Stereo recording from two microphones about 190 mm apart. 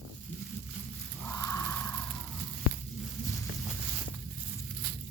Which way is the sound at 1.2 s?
15° left (ahead or behind).